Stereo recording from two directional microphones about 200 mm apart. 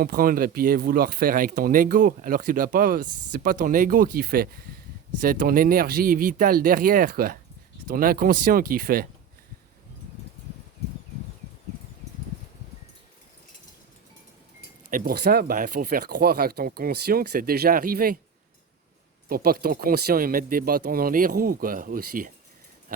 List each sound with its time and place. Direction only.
0.0 s speech: 45° right (ahead or behind)
14.8 s speech: 45° right (ahead or behind)
19.3 s speech: 50° right (ahead or behind)
22.9 s a sound: 45° right (ahead or behind)